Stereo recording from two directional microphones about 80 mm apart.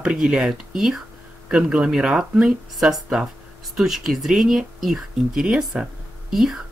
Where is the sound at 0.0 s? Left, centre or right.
Centre.